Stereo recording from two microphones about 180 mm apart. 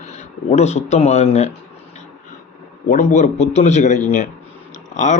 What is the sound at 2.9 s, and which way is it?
A man's voice, 45° left (ahead or behind).